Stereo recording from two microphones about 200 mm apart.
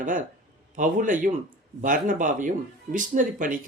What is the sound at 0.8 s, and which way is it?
Speech, 40° right (ahead or behind).